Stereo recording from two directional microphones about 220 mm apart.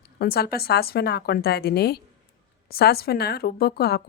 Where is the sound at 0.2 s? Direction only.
45° left (ahead or behind).